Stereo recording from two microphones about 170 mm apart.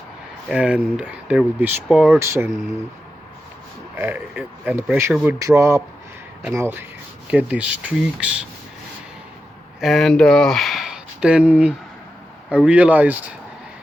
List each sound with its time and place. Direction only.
0.4 s speech: 5° right (ahead or behind)
3.9 s speech: 10° right (ahead or behind)
9.8 s speech: centre (ahead or behind)